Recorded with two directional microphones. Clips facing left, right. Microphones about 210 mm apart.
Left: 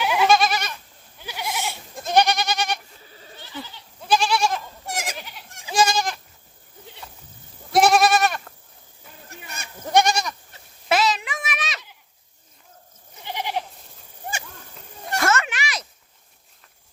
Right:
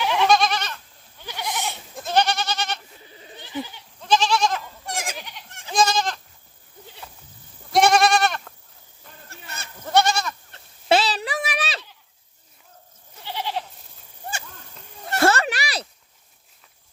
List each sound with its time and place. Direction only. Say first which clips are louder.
0.0 s goat: even; 5° left (ahead or behind)
2.0 s goat: left 2 dB; 15° left (ahead or behind)
3.0 s goat: right 2 dB; 20° right (ahead or behind)
4.0 s goat: even; 10° left (ahead or behind)
6.8 s goat: left 1 dB; centre (ahead or behind)
9.3 s goat: left 1 dB; 15° left (ahead or behind)
10.8 s a sound: right 1 dB; 30° right (ahead or behind)
13.2 s goat: left 1 dB; 15° left (ahead or behind)
15.2 s a sound: right 4 dB; 35° right (ahead or behind)